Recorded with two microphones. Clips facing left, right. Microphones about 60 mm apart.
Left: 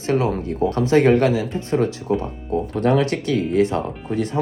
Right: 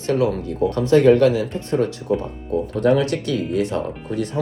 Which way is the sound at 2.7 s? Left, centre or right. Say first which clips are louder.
Right 1 dB; left.